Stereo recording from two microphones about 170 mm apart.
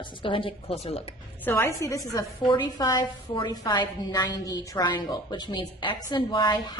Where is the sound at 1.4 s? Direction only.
10° left (ahead or behind).